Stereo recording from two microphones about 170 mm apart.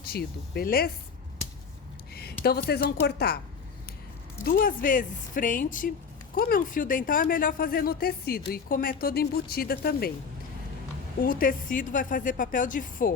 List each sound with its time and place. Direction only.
0.0 s speech: 65° left (ahead or behind)
2.6 s speech: 70° left (ahead or behind)
4.4 s a woman's voice: 55° left (ahead or behind)
11.3 s a woman's voice: 55° left (ahead or behind)